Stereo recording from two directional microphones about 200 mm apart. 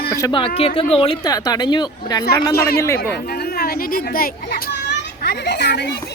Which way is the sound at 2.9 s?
50° left (ahead or behind).